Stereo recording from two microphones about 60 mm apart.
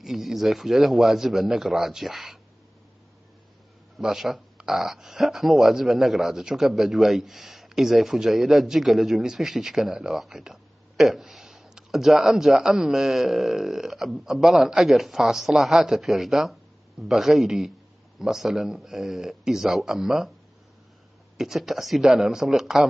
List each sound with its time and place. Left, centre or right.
0.0 s speech: centre
4.0 s a man's voice: centre
21.4 s a man's voice: centre